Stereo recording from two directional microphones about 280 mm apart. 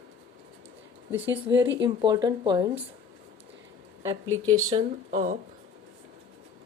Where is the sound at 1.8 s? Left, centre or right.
Centre.